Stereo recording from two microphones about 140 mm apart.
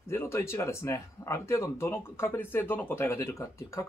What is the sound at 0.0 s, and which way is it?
Speech, 15° left (ahead or behind).